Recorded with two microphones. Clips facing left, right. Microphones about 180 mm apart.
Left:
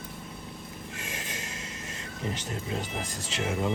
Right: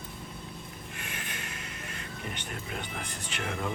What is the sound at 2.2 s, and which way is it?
Speech, 25° left (ahead or behind).